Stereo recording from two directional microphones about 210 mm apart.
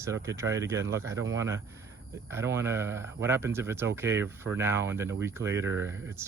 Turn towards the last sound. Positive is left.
turn(degrees=-15)  # may be behind; listen again after turning